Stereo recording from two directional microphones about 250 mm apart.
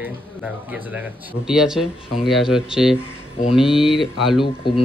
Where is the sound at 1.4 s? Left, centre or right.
Centre.